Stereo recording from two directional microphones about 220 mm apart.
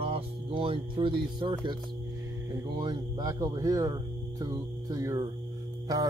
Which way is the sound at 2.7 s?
15° right (ahead or behind).